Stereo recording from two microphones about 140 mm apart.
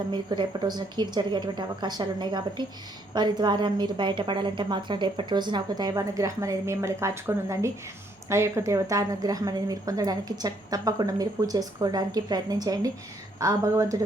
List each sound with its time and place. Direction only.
0.1 s a woman's voice: 30° right (ahead or behind)